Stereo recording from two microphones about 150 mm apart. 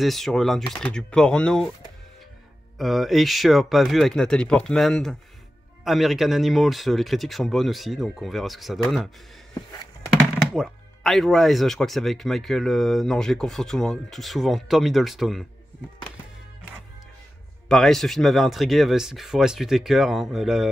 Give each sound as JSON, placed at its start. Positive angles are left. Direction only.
{"t": 0.0, "sound": "speech", "side_deg": 0}
{"t": 2.8, "sound": "speech", "side_deg": 0}
{"t": 17.6, "sound": "speech", "side_deg": 5}